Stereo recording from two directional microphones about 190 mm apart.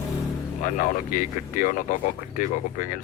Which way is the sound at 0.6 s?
45° left (ahead or behind).